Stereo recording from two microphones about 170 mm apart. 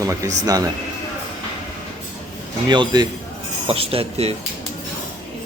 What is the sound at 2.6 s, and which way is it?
A man's voice, 25° right (ahead or behind).